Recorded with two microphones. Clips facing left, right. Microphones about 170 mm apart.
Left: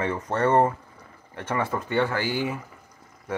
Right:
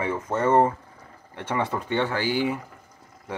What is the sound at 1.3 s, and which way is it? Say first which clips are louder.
Speech: even; 20° right (ahead or behind).